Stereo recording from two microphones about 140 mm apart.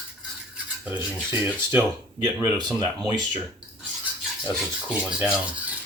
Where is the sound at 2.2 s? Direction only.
30° right (ahead or behind).